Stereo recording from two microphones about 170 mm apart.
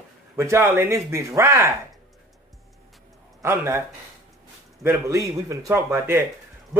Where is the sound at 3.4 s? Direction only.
15° right (ahead or behind).